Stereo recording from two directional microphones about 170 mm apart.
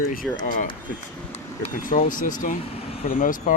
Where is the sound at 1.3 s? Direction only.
45° left (ahead or behind).